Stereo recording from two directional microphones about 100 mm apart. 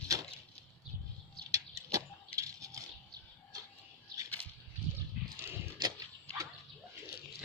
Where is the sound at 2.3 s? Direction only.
35° right (ahead or behind).